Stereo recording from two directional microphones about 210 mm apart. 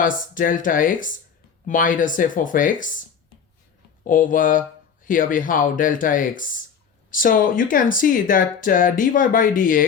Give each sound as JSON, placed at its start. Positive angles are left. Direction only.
{"t": 0.0, "sound": "speech", "side_deg": 40}
{"t": 4.0, "sound": "speech", "side_deg": 40}